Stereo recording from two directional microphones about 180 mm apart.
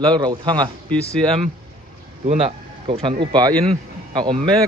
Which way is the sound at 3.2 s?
25° right (ahead or behind).